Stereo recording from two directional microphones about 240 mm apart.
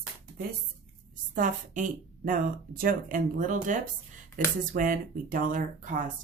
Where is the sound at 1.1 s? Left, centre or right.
Right.